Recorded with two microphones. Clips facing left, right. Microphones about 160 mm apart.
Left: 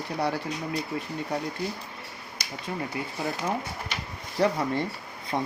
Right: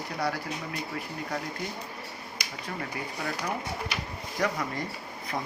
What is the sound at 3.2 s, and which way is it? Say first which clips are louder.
Speech: left 3 dB; 20° left (ahead or behind).